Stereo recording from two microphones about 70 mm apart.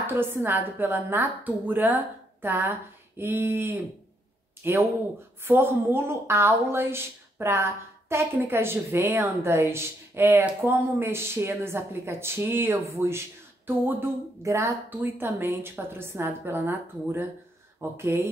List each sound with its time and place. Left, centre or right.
0.0 s a woman's voice: right
14.4 s speech: right
14.9 s a woman's voice: right